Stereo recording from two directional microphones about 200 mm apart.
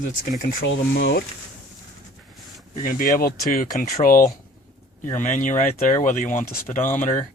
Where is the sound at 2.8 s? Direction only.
45° left (ahead or behind).